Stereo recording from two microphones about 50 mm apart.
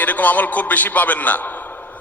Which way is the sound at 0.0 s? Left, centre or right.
Left.